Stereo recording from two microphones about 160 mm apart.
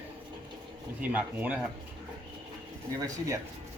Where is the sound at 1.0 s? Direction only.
10° right (ahead or behind).